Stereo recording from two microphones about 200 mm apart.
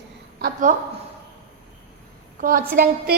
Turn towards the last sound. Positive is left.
turn(degrees=-50)  # may be behind; listen again after turning